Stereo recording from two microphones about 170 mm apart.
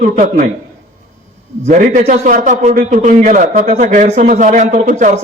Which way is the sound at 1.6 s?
50° right (ahead or behind).